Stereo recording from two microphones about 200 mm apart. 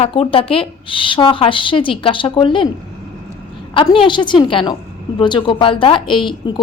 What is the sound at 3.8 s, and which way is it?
A woman's voice, 25° left (ahead or behind).